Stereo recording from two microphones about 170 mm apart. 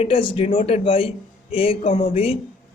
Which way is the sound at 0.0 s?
30° left (ahead or behind).